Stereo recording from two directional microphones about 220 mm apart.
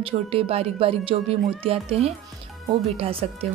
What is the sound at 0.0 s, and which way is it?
A woman's voice, 25° right (ahead or behind).